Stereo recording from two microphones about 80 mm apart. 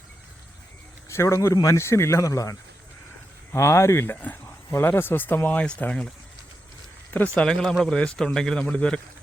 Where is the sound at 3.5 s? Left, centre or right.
Left.